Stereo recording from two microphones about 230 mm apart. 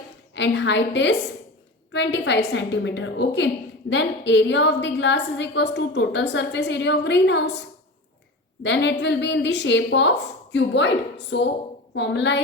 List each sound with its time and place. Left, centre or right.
0.3 s a woman's voice: left
8.6 s a woman's voice: left